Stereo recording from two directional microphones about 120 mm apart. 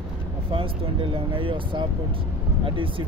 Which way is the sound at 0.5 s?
50° right (ahead or behind).